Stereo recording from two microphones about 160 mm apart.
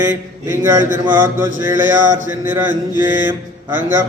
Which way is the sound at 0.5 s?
15° right (ahead or behind).